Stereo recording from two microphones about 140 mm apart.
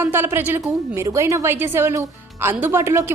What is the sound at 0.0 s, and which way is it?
A woman's voice, 15° right (ahead or behind).